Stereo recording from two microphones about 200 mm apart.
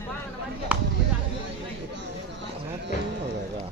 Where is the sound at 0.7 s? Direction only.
5° right (ahead or behind).